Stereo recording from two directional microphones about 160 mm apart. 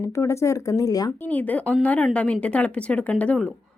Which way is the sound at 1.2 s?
10° left (ahead or behind).